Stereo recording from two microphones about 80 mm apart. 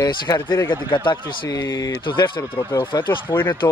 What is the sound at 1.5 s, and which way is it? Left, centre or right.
Speech, left.